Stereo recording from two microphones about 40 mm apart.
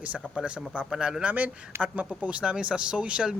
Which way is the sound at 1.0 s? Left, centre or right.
Centre.